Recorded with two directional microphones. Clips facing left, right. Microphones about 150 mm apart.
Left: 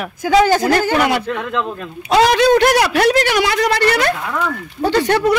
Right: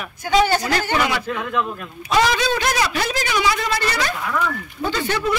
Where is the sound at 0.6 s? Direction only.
55° left (ahead or behind).